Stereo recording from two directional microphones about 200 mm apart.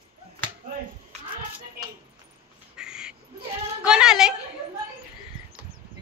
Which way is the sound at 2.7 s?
5° right (ahead or behind).